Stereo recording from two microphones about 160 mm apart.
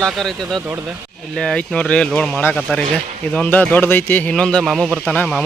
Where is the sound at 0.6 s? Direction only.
10° right (ahead or behind).